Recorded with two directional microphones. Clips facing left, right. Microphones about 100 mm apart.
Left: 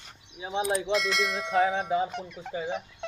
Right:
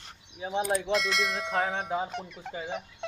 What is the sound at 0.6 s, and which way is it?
Speech, centre (ahead or behind).